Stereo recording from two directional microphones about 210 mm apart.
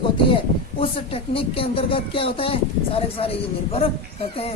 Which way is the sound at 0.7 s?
25° left (ahead or behind).